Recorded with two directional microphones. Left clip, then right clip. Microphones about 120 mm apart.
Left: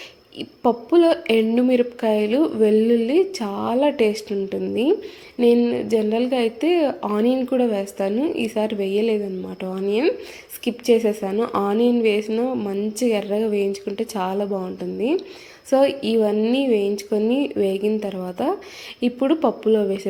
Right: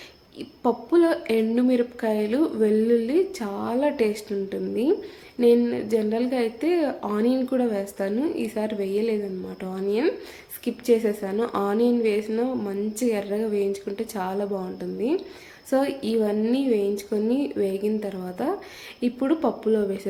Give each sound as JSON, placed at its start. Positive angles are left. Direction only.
{"t": 0.3, "sound": "a woman's voice", "side_deg": 25}